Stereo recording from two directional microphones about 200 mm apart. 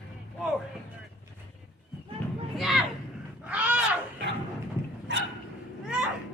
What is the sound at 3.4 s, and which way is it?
Wild animals, 5° right (ahead or behind).